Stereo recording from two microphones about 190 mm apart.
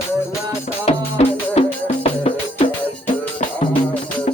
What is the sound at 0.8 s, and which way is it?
Music, 35° left (ahead or behind).